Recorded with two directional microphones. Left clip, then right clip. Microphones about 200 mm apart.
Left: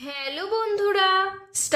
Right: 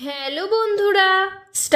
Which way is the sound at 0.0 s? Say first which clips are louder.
Right 5 dB; 35° right (ahead or behind).